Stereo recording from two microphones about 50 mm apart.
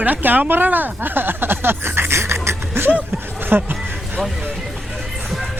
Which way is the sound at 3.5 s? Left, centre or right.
Right.